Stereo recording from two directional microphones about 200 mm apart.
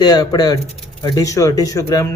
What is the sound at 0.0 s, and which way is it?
Speech, 20° left (ahead or behind).